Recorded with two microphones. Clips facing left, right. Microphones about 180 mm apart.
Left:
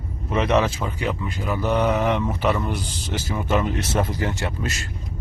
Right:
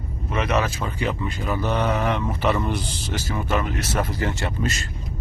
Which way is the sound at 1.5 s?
15° left (ahead or behind).